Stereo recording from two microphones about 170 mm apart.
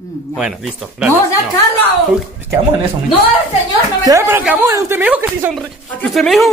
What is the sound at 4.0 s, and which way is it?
A woman's voice, 20° right (ahead or behind).